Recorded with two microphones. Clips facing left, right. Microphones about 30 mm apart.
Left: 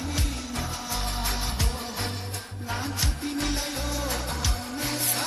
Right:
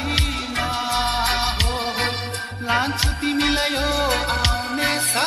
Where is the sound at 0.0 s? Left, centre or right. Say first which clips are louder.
Right 9 dB; right.